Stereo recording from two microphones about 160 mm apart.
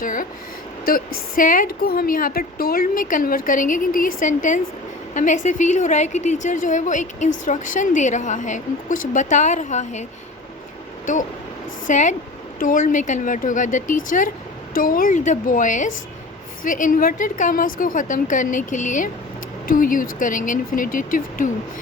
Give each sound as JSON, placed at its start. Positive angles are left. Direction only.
{"t": 0.0, "sound": "a woman's voice", "side_deg": 60}